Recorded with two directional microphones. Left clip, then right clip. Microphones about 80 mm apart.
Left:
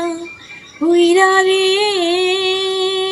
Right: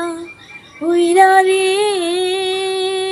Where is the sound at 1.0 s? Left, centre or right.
Right.